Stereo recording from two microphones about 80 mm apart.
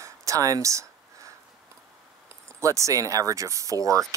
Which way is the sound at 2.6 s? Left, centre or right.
Right.